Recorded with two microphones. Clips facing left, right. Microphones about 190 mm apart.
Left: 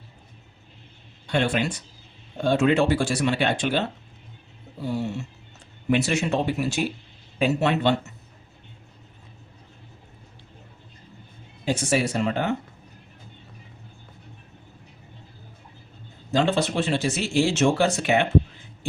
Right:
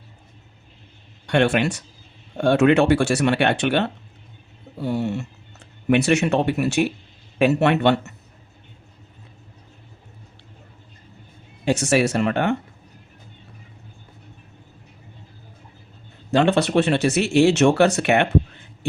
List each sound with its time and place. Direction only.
1.3 s speech: 70° right (ahead or behind)
11.6 s speech: 75° right (ahead or behind)
16.3 s speech: 65° right (ahead or behind)